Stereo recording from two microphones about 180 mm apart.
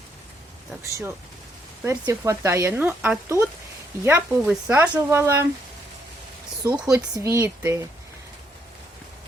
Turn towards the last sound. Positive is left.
turn(degrees=-15)  # may be behind; listen again after turning